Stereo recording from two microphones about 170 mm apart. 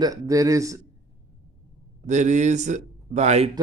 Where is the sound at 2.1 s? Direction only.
45° right (ahead or behind).